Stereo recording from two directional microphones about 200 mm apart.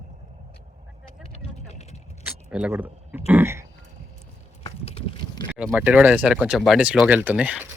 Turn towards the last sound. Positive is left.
turn(degrees=-5)  # may be behind; listen again after turning